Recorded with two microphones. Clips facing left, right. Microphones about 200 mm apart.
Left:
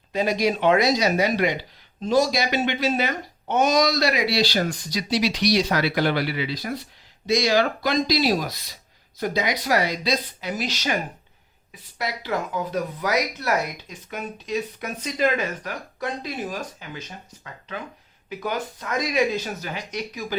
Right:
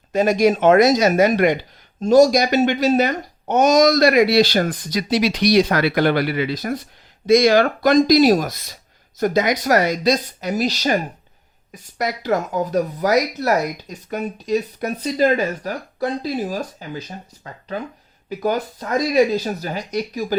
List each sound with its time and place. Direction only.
0.1 s speech: 50° right (ahead or behind)